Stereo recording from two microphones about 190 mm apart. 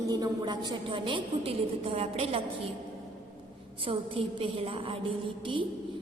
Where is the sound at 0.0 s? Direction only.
20° right (ahead or behind).